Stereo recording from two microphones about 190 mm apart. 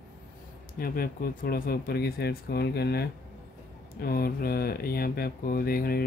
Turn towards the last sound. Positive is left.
turn(degrees=50)  # may be behind; listen again after turning